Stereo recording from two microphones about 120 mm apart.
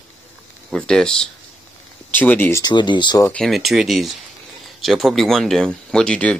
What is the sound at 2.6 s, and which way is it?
Speech, 40° left (ahead or behind).